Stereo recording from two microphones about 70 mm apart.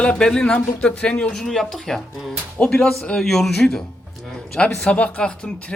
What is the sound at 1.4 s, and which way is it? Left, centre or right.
A man's voice, centre.